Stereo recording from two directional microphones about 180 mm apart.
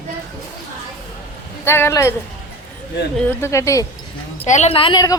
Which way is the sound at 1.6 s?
15° left (ahead or behind).